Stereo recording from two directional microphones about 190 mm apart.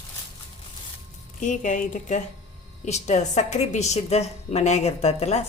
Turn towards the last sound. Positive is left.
turn(degrees=35)  # may be behind; listen again after turning